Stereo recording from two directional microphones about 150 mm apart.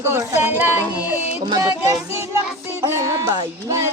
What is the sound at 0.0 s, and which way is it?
Speech, 20° right (ahead or behind).